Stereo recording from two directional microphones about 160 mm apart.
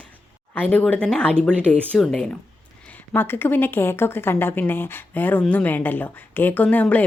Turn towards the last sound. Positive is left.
turn(degrees=10)  # may be behind; listen again after turning